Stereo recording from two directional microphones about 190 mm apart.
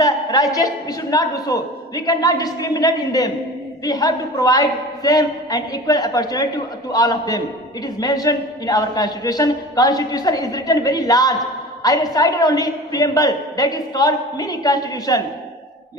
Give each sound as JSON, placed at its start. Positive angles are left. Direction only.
{"t": 0.0, "sound": "a man's voice", "side_deg": 20}